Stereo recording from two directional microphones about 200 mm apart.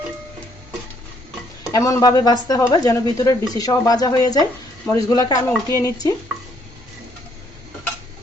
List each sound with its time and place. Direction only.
1.7 s a woman's voice: 15° left (ahead or behind)